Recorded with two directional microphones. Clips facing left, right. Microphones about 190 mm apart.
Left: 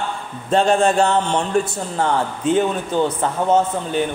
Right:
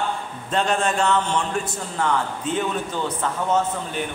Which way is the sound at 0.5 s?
30° left (ahead or behind).